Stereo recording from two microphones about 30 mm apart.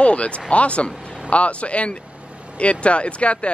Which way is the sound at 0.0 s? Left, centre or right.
Left.